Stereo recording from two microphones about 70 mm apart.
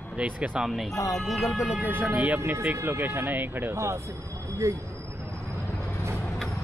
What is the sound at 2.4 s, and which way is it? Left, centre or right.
Speech, right.